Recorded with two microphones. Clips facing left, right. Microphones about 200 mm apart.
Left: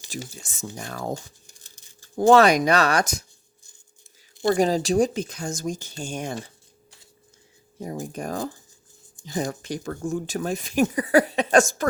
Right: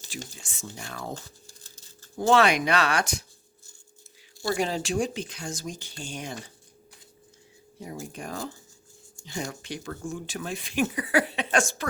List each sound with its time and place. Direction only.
0.4 s speech: 45° left (ahead or behind)
1.1 s a sound: 15° left (ahead or behind)
2.1 s speech: 45° left (ahead or behind)
4.5 s speech: 40° left (ahead or behind)
7.8 s speech: 45° left (ahead or behind)